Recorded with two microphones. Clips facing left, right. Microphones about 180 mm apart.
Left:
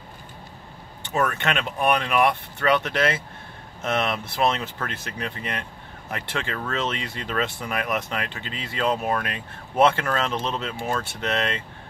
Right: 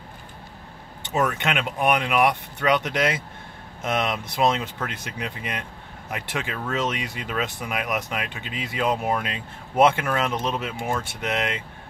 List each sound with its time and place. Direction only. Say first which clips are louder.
1.0 s speech: even; 15° right (ahead or behind)